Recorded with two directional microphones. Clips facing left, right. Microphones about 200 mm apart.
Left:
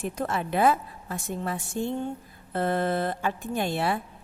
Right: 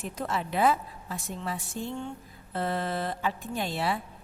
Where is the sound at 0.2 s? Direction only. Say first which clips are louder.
Left 2 dB; 50° left (ahead or behind).